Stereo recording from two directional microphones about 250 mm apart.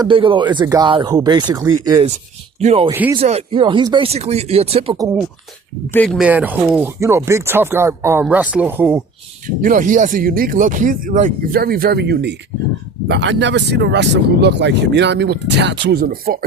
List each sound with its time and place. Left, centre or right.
0.0 s speech: centre
2.9 s speech: centre
3.2 s speech: right
5.9 s speech: centre
9.6 s speech: right